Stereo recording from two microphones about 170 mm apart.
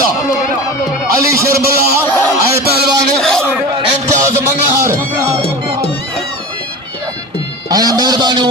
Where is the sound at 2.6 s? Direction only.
70° right (ahead or behind).